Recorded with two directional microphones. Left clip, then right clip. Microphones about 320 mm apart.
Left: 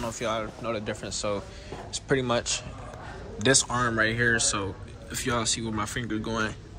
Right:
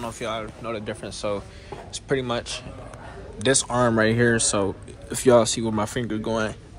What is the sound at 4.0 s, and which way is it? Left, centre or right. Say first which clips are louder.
Speech: right 3 dB; centre.